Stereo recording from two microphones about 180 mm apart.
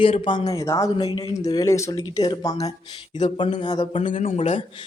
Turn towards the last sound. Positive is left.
turn(degrees=30)  # may be behind; listen again after turning